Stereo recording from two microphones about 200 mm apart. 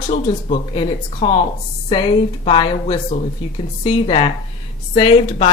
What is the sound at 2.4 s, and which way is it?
A woman's voice, 25° left (ahead or behind).